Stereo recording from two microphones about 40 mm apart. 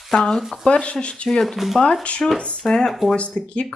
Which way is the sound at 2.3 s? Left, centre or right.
Centre.